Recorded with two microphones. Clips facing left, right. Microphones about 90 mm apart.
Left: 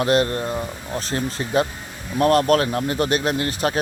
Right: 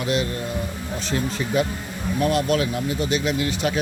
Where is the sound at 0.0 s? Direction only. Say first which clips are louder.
Left 5 dB; 50° left (ahead or behind).